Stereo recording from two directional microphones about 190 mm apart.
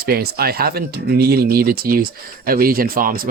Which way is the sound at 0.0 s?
55° right (ahead or behind).